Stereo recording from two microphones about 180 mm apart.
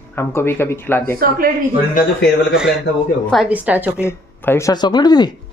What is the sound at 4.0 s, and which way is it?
Speech, 15° left (ahead or behind).